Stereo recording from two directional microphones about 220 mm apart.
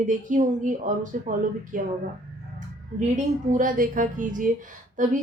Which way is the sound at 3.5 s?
35° right (ahead or behind).